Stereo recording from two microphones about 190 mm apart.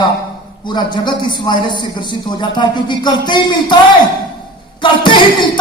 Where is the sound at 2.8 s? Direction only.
25° left (ahead or behind).